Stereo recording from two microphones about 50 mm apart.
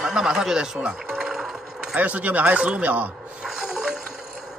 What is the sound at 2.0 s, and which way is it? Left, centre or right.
Speech, right.